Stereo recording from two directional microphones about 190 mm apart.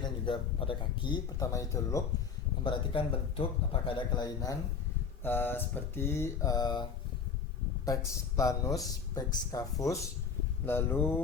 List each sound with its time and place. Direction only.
0.0 s speech: 25° left (ahead or behind)
2.6 s speech: 30° left (ahead or behind)
7.9 s speech: 15° left (ahead or behind)